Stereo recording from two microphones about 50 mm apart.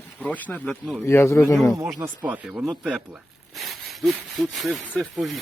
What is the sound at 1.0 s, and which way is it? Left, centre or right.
Speech, left.